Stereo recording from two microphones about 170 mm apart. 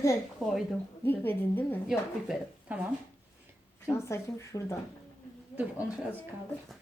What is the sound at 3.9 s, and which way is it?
Speech, 15° left (ahead or behind).